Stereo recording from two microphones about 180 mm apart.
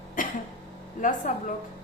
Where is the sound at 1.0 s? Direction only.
45° left (ahead or behind).